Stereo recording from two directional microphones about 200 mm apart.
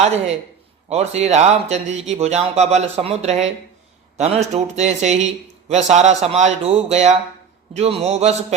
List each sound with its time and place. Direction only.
0.9 s speech: 30° right (ahead or behind)